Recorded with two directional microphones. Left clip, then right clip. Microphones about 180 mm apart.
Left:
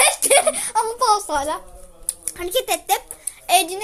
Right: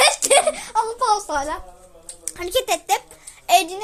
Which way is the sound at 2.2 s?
5° right (ahead or behind).